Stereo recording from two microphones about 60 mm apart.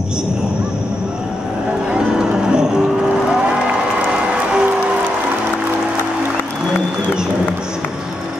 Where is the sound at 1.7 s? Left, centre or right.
Centre.